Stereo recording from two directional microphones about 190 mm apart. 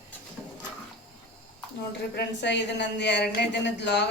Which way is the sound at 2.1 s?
65° left (ahead or behind).